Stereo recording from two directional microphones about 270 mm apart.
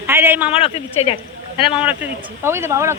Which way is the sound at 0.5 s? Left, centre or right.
Left.